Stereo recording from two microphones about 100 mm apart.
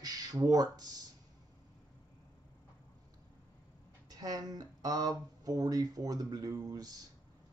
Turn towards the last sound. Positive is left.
turn(degrees=-40)  # may be behind; listen again after turning